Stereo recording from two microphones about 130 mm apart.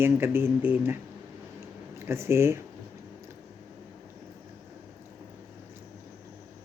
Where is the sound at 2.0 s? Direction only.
20° right (ahead or behind).